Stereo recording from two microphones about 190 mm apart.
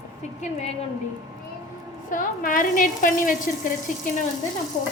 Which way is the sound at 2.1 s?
45° left (ahead or behind).